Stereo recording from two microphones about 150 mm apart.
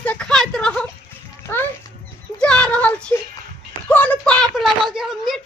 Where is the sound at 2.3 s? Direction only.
5° left (ahead or behind).